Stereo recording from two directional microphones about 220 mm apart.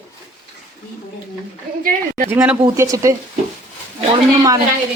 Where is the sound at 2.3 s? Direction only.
5° right (ahead or behind).